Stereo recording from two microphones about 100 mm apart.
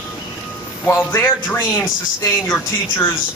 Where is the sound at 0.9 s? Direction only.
25° left (ahead or behind).